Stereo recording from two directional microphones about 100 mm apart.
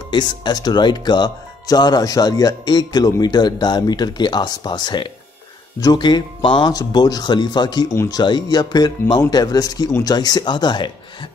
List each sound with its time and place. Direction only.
0.1 s speech: 45° left (ahead or behind)